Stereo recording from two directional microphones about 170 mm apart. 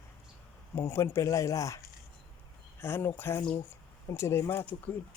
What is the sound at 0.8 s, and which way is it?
A man's voice, 15° left (ahead or behind).